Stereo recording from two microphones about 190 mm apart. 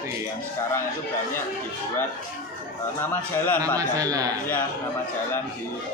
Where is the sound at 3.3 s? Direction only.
10° left (ahead or behind).